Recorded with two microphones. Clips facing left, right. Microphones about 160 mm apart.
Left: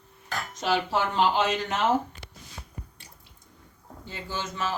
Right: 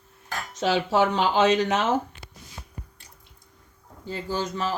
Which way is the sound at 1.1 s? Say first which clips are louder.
Right 3 dB; 80° right.